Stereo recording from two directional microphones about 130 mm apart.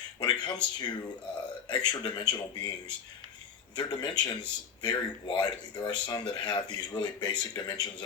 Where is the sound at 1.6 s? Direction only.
35° left (ahead or behind).